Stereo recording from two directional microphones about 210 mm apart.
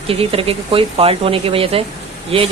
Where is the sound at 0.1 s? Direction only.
25° right (ahead or behind).